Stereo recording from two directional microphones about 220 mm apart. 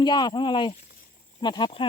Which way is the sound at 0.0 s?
20° left (ahead or behind).